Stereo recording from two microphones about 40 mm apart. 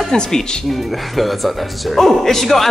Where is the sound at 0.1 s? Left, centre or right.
Centre.